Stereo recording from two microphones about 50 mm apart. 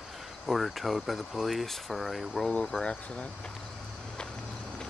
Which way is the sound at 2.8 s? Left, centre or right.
Centre.